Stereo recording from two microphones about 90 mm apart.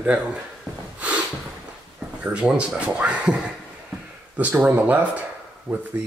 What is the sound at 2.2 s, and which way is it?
Speech, 15° right (ahead or behind).